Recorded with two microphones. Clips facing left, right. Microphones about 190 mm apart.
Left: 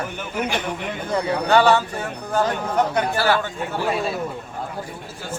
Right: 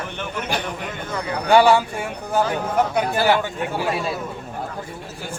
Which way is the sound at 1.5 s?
10° right (ahead or behind).